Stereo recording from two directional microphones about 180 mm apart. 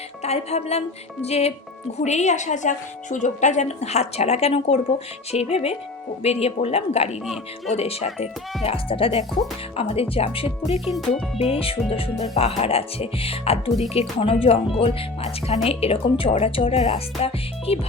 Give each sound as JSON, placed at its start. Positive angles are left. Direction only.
{"t": 0.2, "sound": "speech", "side_deg": 35}